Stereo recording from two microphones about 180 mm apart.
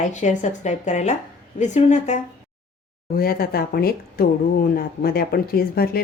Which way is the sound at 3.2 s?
55° left (ahead or behind).